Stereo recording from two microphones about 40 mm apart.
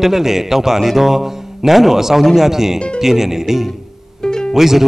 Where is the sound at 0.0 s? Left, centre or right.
Centre.